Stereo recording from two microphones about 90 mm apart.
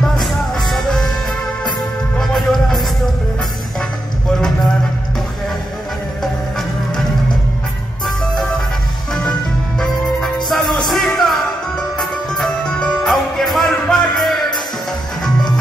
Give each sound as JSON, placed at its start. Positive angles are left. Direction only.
{"t": 0.0, "sound": "music", "side_deg": 0}
{"t": 2.1, "sound": "music", "side_deg": 0}
{"t": 9.8, "sound": "music", "side_deg": 0}